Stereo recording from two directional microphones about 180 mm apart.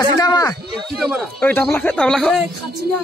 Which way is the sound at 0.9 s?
Centre (ahead or behind).